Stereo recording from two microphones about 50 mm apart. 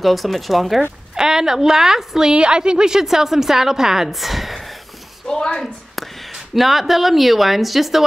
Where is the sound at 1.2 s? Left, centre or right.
Centre.